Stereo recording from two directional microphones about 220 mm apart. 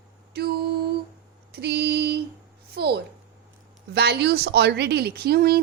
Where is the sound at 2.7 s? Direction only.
45° right (ahead or behind).